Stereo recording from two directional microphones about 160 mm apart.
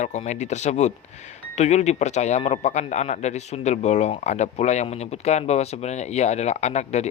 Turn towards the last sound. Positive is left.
turn(degrees=45)  # may be behind; listen again after turning